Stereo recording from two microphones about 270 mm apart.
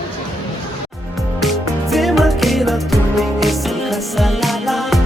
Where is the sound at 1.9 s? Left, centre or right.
Centre.